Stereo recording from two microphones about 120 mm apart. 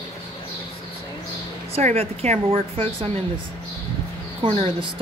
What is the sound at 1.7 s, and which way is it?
A woman's voice, 60° right (ahead or behind).